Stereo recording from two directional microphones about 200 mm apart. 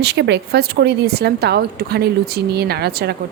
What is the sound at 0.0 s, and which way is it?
A woman's voice, 55° right (ahead or behind).